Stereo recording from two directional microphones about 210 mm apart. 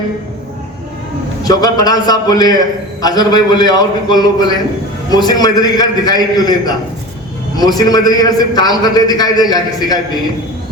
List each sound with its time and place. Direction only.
1.5 s a man's voice: 20° left (ahead or behind)
7.8 s a man's voice: 20° left (ahead or behind)